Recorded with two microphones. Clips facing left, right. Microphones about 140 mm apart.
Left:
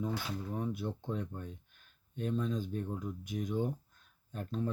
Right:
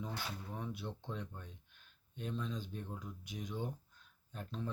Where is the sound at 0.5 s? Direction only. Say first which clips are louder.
Left 9 dB; 50° left (ahead or behind).